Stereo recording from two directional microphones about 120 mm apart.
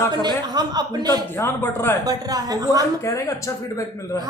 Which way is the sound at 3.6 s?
25° left (ahead or behind).